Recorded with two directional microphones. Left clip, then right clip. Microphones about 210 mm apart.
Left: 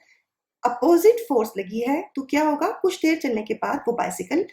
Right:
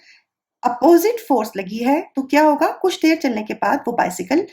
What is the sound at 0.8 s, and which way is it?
Speech, 40° right (ahead or behind).